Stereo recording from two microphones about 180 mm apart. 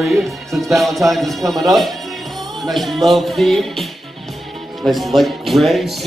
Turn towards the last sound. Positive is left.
turn(degrees=0)  # may be behind; listen again after turning